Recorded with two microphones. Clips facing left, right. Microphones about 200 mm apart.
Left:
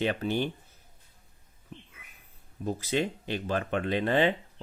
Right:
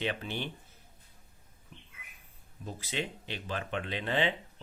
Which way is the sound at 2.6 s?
45° left (ahead or behind).